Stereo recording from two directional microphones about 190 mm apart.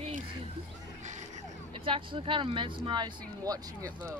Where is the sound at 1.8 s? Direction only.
25° right (ahead or behind).